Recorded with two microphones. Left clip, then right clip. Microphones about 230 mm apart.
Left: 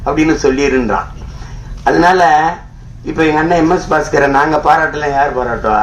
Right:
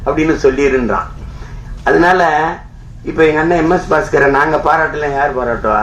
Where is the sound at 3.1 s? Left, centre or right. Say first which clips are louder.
Even; left.